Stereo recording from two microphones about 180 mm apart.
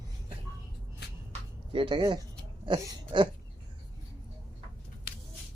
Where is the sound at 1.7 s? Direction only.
30° right (ahead or behind).